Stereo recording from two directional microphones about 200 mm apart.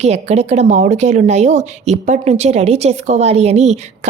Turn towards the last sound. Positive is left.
turn(degrees=-35)  # may be behind; listen again after turning